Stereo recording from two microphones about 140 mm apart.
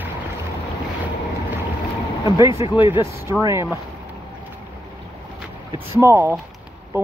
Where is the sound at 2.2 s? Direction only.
25° right (ahead or behind).